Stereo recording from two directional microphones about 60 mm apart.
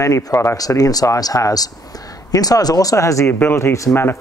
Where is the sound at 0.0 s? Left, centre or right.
Left.